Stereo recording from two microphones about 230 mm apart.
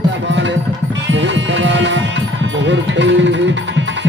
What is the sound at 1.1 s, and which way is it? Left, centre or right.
Music, right.